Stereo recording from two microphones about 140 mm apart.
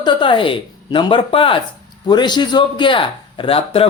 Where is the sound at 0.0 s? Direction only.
35° left (ahead or behind).